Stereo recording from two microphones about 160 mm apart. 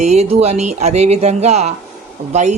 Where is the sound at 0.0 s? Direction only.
45° right (ahead or behind).